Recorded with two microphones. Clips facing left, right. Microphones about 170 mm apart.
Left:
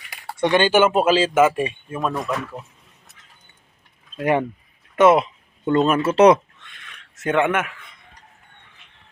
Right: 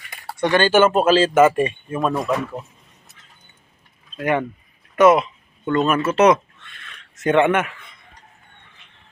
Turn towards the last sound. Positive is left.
turn(degrees=5)  # may be behind; listen again after turning